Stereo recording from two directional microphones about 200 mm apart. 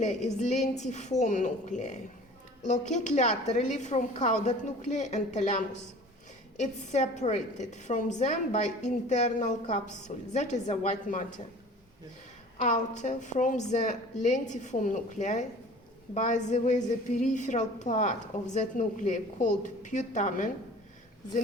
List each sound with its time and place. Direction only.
0.0 s a woman's voice: 35° left (ahead or behind)
13.0 s a woman's voice: 40° left (ahead or behind)